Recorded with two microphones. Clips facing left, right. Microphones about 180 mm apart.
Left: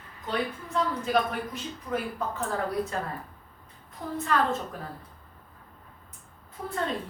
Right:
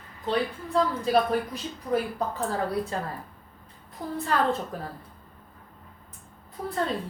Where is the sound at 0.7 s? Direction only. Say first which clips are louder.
Right 4 dB; 35° right (ahead or behind).